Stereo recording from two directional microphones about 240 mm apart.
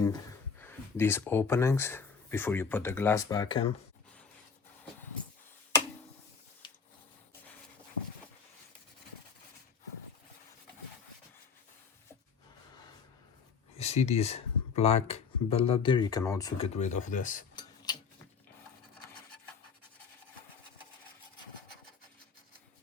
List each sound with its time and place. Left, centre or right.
0.6 s speech: centre
6.6 s a sound: centre
13.7 s speech: left
17.5 s tick-tock: centre